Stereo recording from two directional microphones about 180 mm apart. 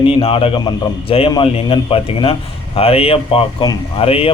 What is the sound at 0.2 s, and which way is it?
A man's voice, 30° left (ahead or behind).